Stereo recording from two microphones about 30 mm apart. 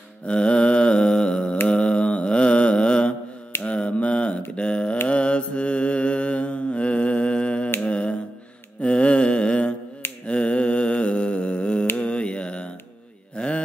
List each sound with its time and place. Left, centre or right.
0.3 s mantra: left
3.6 s mantra: left
10.2 s a sound: left